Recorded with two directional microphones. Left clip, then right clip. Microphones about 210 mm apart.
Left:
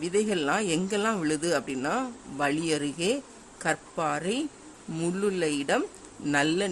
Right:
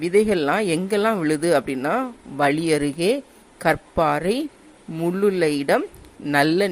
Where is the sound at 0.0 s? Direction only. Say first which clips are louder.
Right 8 dB; 15° right (ahead or behind).